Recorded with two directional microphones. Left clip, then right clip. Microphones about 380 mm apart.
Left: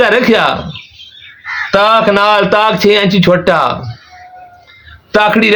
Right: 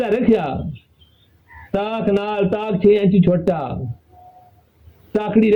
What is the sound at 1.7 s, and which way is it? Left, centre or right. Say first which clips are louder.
A man's voice: left 12 dB; centre.